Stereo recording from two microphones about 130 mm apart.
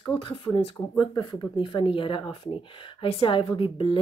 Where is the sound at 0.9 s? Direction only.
35° left (ahead or behind).